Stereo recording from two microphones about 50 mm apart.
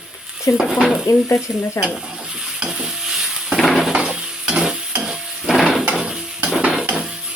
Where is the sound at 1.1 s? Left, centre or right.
Left.